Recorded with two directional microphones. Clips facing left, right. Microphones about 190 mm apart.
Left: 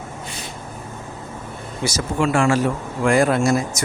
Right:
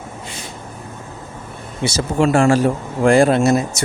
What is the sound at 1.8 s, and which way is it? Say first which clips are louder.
Speech: right 4 dB; 30° right (ahead or behind).